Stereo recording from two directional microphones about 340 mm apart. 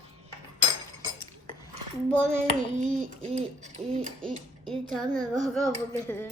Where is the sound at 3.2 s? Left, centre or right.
Centre.